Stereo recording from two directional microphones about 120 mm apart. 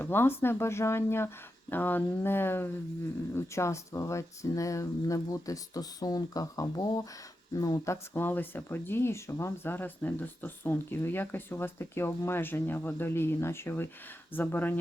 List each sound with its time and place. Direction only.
0.0 s speech: 20° left (ahead or behind)
8.1 s speech: 15° left (ahead or behind)